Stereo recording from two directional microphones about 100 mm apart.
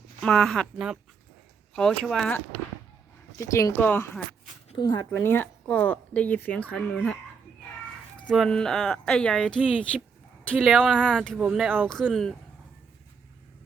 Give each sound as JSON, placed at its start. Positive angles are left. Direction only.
{"t": 0.2, "sound": "speech", "side_deg": 5}
{"t": 1.7, "sound": "speech", "side_deg": 5}
{"t": 3.3, "sound": "speech", "side_deg": 30}
{"t": 4.8, "sound": "speech", "side_deg": 45}
{"t": 5.1, "sound": "speech", "side_deg": 20}
{"t": 8.3, "sound": "speech", "side_deg": 5}
{"t": 11.3, "sound": "speech", "side_deg": -10}
{"t": 12.1, "sound": "speech", "side_deg": 5}